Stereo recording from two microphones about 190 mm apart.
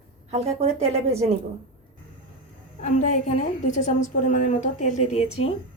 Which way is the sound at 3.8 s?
45° left (ahead or behind).